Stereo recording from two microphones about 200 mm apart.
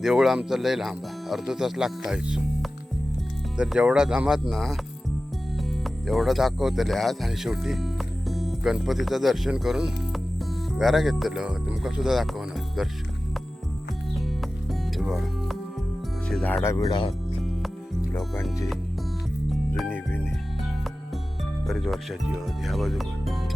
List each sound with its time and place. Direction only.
0.0 s speech: centre (ahead or behind)
14.7 s music: centre (ahead or behind)
16.3 s speech: 5° left (ahead or behind); by 17.2 s 25° left (ahead or behind)
18.1 s speech: 10° left (ahead or behind)
19.5 s music: centre (ahead or behind)
21.7 s speech: centre (ahead or behind)